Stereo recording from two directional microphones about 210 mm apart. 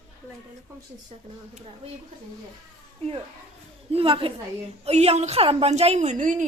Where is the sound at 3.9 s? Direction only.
25° right (ahead or behind).